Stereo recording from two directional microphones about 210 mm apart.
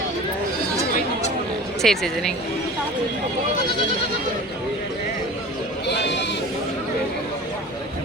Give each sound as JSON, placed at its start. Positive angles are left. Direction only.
{"t": 1.8, "sound": "speech", "side_deg": 0}
{"t": 5.9, "sound": "sheep", "side_deg": 55}